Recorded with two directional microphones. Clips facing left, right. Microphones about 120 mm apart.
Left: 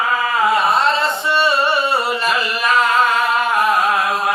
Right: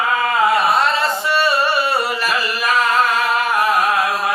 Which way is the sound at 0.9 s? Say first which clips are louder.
Even; 25° left (ahead or behind).